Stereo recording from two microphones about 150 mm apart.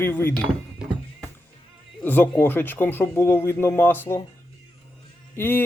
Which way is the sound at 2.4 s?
15° left (ahead or behind).